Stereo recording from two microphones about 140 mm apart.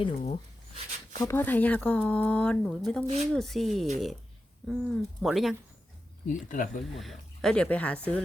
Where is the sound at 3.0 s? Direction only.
55° right (ahead or behind).